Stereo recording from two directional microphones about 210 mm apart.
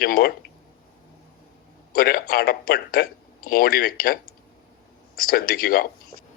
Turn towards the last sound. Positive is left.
turn(degrees=45)  # may be behind; listen again after turning